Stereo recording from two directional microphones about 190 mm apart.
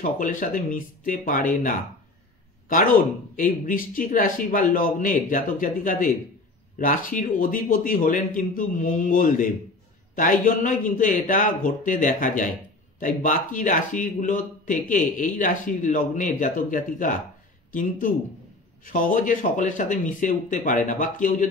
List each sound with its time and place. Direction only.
0.2 s speech: 45° left (ahead or behind)